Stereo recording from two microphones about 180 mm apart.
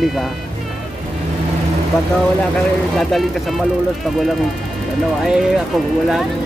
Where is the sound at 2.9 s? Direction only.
Centre (ahead or behind).